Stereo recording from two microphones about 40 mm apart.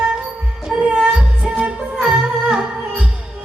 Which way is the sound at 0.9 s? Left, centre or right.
Right.